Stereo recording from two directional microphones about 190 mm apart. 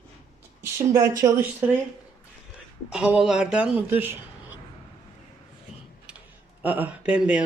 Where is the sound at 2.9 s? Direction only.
5° right (ahead or behind).